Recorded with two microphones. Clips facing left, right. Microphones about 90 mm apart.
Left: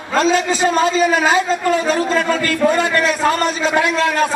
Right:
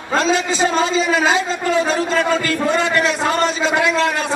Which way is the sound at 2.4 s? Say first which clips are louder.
Left 2 dB; 45° left (ahead or behind).